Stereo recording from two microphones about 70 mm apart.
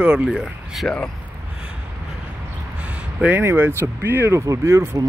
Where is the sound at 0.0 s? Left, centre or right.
Centre.